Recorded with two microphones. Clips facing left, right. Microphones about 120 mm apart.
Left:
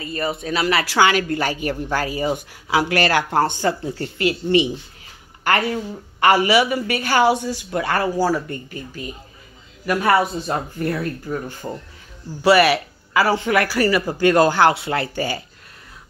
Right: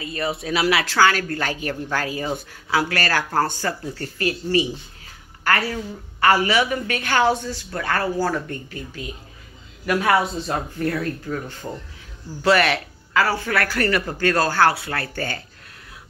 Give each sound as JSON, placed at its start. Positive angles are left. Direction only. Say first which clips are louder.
{"t": 0.0, "sound": "speech", "louder": "left 1 dB", "side_deg": 0}
{"t": 0.8, "sound": "a woman's voice", "louder": "left 1 dB", "side_deg": 15}
{"t": 13.7, "sound": "a woman's voice", "louder": "left 3 dB", "side_deg": 5}